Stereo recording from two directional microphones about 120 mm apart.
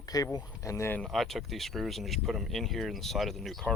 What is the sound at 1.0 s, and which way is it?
Speech, centre (ahead or behind).